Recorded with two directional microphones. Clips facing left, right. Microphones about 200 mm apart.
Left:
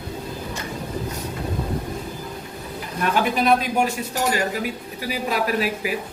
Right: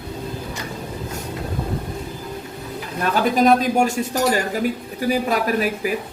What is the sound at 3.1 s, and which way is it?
Speech, 40° right (ahead or behind).